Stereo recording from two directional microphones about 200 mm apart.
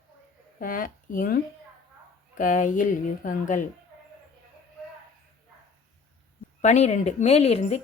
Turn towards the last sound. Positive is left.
turn(degrees=30)  # may be behind; listen again after turning